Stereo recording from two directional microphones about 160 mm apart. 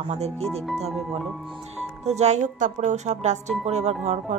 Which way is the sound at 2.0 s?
45° right (ahead or behind).